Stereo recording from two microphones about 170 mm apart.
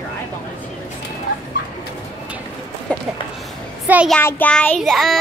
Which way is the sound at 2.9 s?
5° left (ahead or behind).